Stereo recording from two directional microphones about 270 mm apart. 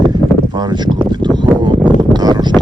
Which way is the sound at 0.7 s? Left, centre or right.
Centre.